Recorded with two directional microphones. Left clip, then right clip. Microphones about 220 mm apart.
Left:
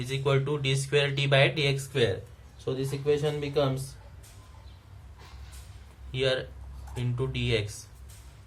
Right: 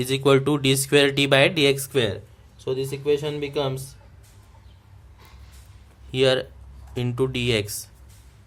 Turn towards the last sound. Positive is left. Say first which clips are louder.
# right 7 dB
turn(degrees=-50)  # may be behind; listen again after turning